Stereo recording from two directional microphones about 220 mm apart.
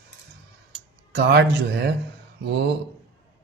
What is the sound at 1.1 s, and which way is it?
Speech, 50° right (ahead or behind).